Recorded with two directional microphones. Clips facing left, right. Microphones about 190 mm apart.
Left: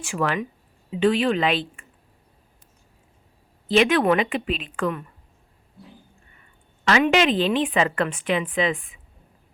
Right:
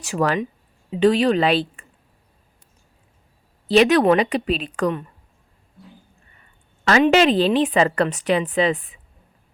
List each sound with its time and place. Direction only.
0.0 s a woman's voice: 40° right (ahead or behind)
3.7 s a woman's voice: 40° right (ahead or behind)
7.0 s a woman's voice: 40° right (ahead or behind)